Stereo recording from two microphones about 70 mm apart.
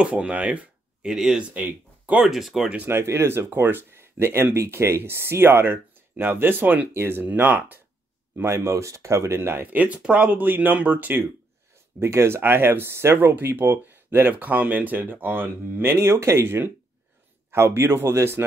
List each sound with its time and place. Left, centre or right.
0.0 s speech: centre
2.2 s speech: centre
2.9 s speech: right
6.9 s speech: right
12.0 s speech: right